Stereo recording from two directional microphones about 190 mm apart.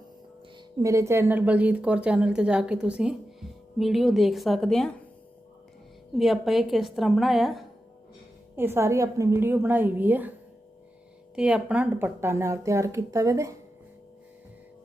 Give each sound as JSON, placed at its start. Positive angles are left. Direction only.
{"t": 0.8, "sound": "a woman's voice", "side_deg": -15}
{"t": 6.1, "sound": "a woman's voice", "side_deg": 0}
{"t": 8.5, "sound": "a woman's voice", "side_deg": -10}
{"t": 11.3, "sound": "a woman's voice", "side_deg": -5}